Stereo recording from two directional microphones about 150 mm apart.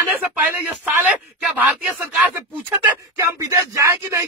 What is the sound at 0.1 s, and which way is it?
Speech, 10° right (ahead or behind).